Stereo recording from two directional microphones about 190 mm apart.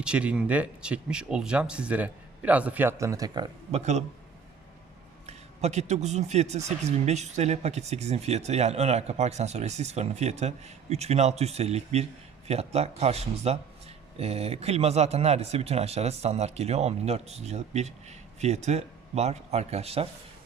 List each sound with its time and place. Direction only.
0.0 s speech: 5° right (ahead or behind); by 3.5 s 20° right (ahead or behind)
3.7 s speech: 35° right (ahead or behind)
5.2 s a man's voice: 35° right (ahead or behind)